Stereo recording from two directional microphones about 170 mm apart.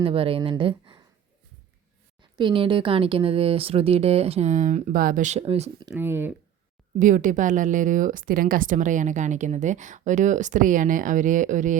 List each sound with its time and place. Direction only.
0.0 s speech: 35° right (ahead or behind)
2.4 s speech: 30° right (ahead or behind)
6.0 s speech: 15° right (ahead or behind)
7.0 s a woman's voice: 50° right (ahead or behind)